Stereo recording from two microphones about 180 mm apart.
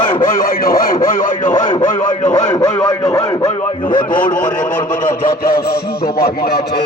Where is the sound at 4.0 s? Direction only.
50° left (ahead or behind).